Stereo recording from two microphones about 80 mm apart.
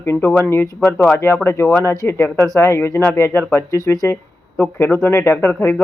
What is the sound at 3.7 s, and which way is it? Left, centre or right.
Speech, left.